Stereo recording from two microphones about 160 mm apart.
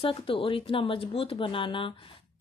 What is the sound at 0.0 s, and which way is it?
Speech, 35° left (ahead or behind).